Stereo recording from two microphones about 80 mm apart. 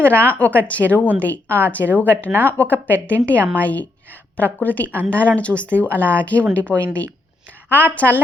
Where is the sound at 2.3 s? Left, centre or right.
Right.